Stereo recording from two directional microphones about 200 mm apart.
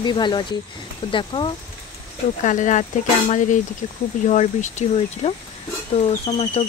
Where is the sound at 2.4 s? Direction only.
40° left (ahead or behind).